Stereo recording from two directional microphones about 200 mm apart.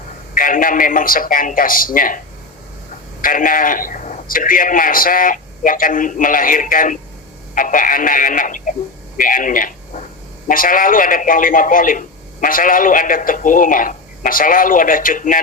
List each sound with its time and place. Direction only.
0.3 s a man's voice: 40° left (ahead or behind)
3.2 s a man's voice: 45° left (ahead or behind)